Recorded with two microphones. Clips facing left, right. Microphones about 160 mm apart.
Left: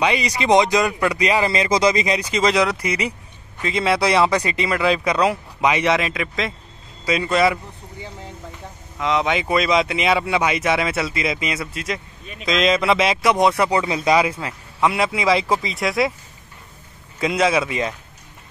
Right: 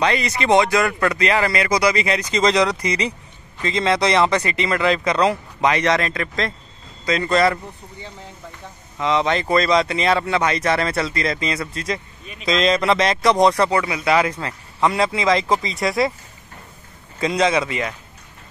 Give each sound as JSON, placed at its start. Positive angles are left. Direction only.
{"t": 0.0, "sound": "speech", "side_deg": 15}
{"t": 8.9, "sound": "speech", "side_deg": 0}
{"t": 13.7, "sound": "speech", "side_deg": 25}
{"t": 14.1, "sound": "speech", "side_deg": 10}
{"t": 17.2, "sound": "speech", "side_deg": 5}